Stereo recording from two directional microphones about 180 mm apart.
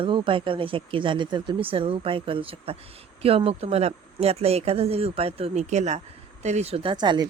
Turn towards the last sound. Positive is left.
turn(degrees=-25)  # may be behind; listen again after turning